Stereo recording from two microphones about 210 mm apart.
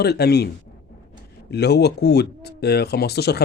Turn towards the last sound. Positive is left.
turn(degrees=50)  # may be behind; listen again after turning